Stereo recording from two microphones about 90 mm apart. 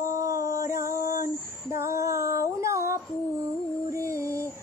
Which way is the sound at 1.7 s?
35° right (ahead or behind).